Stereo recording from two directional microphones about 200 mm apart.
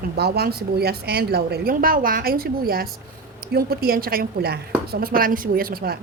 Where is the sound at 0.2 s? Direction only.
50° right (ahead or behind).